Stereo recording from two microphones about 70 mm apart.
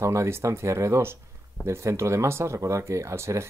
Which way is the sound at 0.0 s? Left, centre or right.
Right.